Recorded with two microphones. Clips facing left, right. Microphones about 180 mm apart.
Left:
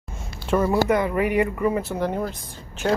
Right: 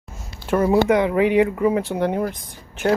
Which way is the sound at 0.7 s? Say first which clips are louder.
Right 6 dB; 15° right (ahead or behind).